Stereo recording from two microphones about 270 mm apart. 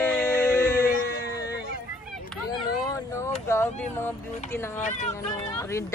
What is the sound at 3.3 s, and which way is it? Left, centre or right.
Speech, centre.